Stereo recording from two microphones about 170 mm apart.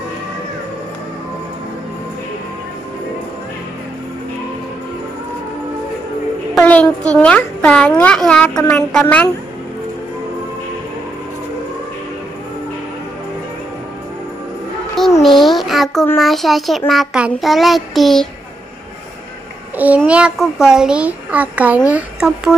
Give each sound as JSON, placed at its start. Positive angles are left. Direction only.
{"t": 6.5, "sound": "music", "side_deg": 10}
{"t": 7.2, "sound": "a child's voice", "side_deg": 10}
{"t": 15.0, "sound": "music", "side_deg": 0}
{"t": 15.4, "sound": "a sound", "side_deg": 0}
{"t": 16.2, "sound": "child singing", "side_deg": 0}
{"t": 20.1, "sound": "a child's voice", "side_deg": -5}